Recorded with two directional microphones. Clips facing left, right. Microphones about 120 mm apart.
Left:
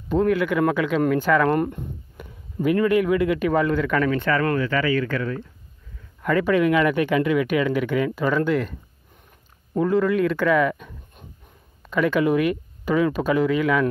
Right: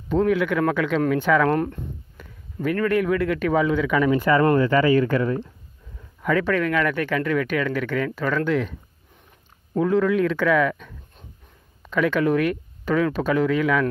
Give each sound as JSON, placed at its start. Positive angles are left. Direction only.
{"t": 0.1, "sound": "speech", "side_deg": 0}
{"t": 1.7, "sound": "a man's voice", "side_deg": 15}
{"t": 4.3, "sound": "speech", "side_deg": -25}
{"t": 6.2, "sound": "speech", "side_deg": 5}
{"t": 9.8, "sound": "speech", "side_deg": 0}